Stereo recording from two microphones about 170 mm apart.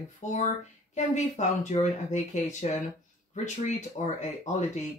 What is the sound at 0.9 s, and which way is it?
Speech, 45° left (ahead or behind).